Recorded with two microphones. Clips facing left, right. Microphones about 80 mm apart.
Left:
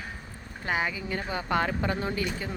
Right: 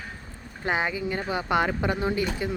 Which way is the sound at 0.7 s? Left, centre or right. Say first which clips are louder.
Right 3 dB; right.